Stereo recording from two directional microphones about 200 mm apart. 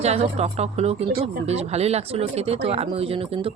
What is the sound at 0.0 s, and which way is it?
Speech, 30° right (ahead or behind).